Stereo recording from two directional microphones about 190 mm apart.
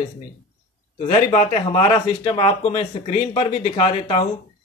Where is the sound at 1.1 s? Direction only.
35° left (ahead or behind).